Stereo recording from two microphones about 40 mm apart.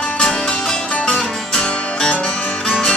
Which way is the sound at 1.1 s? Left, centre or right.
Centre.